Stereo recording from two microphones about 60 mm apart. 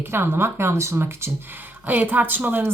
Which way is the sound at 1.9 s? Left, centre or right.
Right.